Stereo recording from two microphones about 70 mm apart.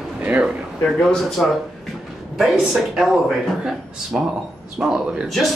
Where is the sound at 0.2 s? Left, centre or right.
Centre.